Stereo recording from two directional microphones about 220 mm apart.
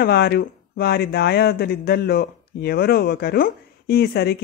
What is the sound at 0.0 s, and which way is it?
Speech, 45° left (ahead or behind).